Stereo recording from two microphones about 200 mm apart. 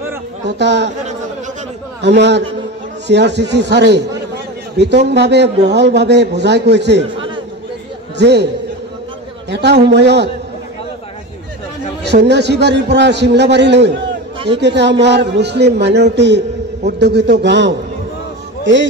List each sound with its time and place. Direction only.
0.5 s speech: 60° right (ahead or behind)
2.0 s speech: 60° right (ahead or behind)
7.0 s a sound: 25° right (ahead or behind)
8.2 s speech: 55° right (ahead or behind)
9.5 s speech: 60° right (ahead or behind)
12.0 s a man's voice: 60° right (ahead or behind)